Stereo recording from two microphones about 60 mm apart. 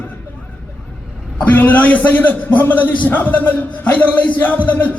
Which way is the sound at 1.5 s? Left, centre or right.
Left.